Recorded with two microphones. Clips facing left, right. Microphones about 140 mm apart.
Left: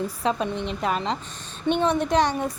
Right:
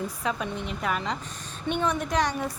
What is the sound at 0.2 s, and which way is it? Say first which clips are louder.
Speech: left 7 dB; 30° left (ahead or behind).